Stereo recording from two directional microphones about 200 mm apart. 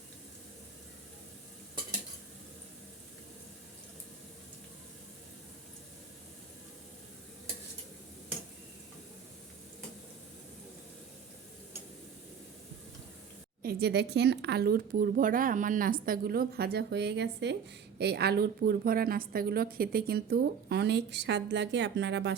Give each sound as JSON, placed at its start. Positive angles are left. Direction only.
{"t": 13.6, "sound": "speech", "side_deg": -50}